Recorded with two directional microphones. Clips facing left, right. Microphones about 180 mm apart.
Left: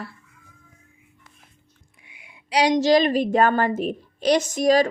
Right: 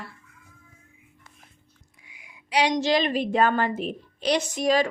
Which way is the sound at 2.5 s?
40° left (ahead or behind).